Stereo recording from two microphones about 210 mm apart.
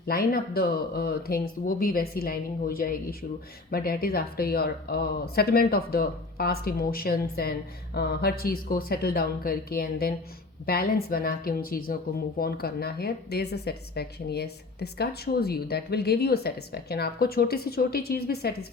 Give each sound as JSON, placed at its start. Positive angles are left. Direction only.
{"t": 0.1, "sound": "speech", "side_deg": 45}